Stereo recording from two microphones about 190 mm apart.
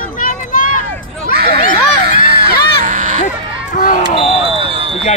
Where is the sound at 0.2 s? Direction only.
45° left (ahead or behind).